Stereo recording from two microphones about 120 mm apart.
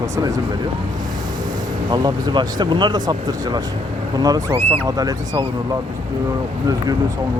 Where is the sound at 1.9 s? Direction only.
35° right (ahead or behind).